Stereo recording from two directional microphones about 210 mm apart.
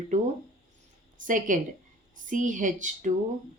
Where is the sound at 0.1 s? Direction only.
35° right (ahead or behind).